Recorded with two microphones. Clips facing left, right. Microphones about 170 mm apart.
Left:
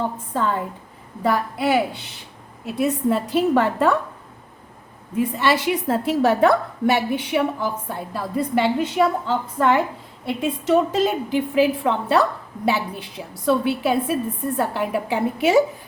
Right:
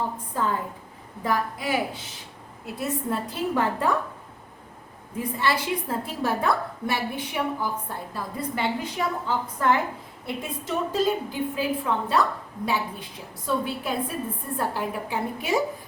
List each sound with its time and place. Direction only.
1.2 s a woman's voice: 75° left (ahead or behind)
2.7 s a woman's voice: 85° left
5.4 s a woman's voice: 75° left (ahead or behind)